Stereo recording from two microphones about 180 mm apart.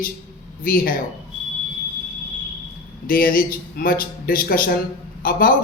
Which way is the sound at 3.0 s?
55° left (ahead or behind).